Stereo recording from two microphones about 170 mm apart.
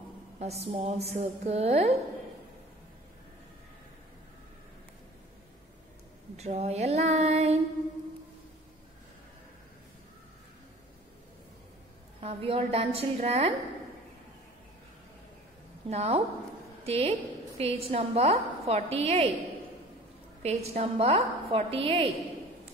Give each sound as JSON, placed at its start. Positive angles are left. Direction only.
{"t": 0.4, "sound": "a woman's voice", "side_deg": -40}
{"t": 6.3, "sound": "a woman's voice", "side_deg": -40}
{"t": 12.2, "sound": "a woman's voice", "side_deg": -35}
{"t": 15.9, "sound": "a woman's voice", "side_deg": -35}
{"t": 20.4, "sound": "a woman's voice", "side_deg": -40}